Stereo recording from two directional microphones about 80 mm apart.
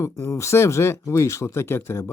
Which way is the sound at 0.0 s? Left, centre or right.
Left.